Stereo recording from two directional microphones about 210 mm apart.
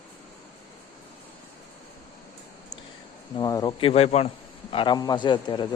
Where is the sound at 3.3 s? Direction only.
20° left (ahead or behind).